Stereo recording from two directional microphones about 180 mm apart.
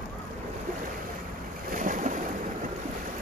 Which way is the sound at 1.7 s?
45° right (ahead or behind).